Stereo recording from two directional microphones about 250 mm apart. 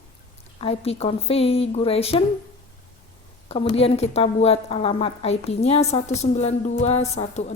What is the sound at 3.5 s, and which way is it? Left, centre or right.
A woman's voice, left.